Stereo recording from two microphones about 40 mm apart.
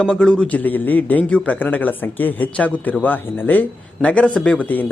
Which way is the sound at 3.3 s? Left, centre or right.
Left.